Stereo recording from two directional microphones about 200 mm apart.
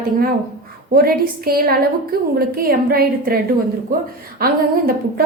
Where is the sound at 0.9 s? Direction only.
50° right (ahead or behind).